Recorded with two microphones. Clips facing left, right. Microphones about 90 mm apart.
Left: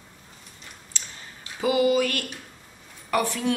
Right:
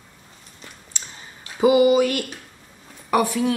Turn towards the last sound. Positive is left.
turn(degrees=-15)  # may be behind; listen again after turning